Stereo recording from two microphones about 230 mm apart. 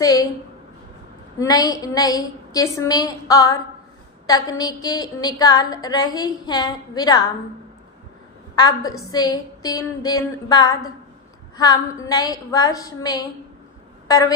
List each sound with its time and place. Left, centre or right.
0.0 s a woman's voice: centre
1.4 s a woman's voice: centre
8.5 s a woman's voice: centre